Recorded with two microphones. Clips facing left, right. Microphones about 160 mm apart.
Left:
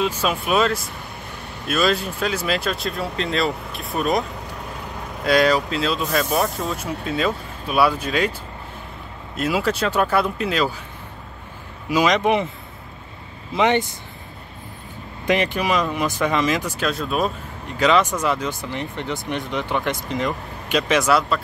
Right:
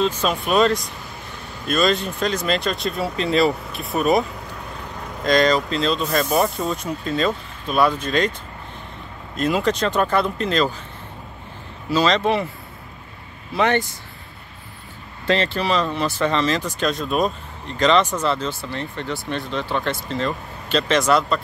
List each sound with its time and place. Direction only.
0.0 s speech: 10° left (ahead or behind)
5.2 s speech: 10° left (ahead or behind)
9.4 s speech: 5° left (ahead or behind)
11.9 s speech: 15° left (ahead or behind)
13.5 s speech: 20° left (ahead or behind)
15.2 s speech: 15° left (ahead or behind)